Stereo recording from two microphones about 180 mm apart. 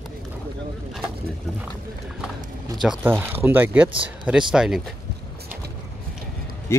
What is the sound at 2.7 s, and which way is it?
A man's voice, 5° right (ahead or behind).